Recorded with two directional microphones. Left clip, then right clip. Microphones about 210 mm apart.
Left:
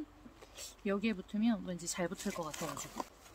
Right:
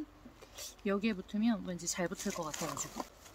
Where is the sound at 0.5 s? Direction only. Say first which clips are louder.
Right 2 dB; centre (ahead or behind).